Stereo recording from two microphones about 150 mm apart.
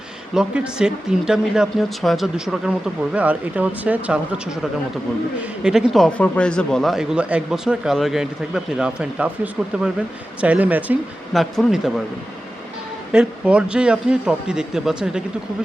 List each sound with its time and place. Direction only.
0.3 s speech: 5° right (ahead or behind)
11.3 s speech: centre (ahead or behind)
13.1 s speech: 5° right (ahead or behind)